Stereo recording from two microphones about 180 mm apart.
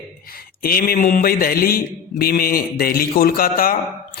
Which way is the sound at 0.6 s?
55° left (ahead or behind).